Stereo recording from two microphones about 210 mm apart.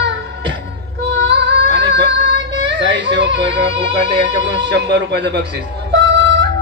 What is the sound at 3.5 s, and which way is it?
Music, 25° right (ahead or behind).